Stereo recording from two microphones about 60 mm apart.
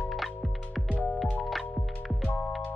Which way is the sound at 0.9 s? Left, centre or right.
Left.